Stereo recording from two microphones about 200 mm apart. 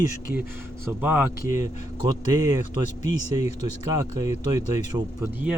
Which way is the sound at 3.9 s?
15° right (ahead or behind).